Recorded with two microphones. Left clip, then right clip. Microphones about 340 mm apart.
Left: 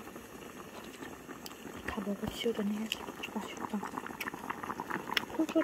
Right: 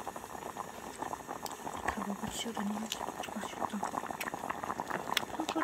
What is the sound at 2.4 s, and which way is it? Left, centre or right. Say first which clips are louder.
Speech: left 8 dB; centre.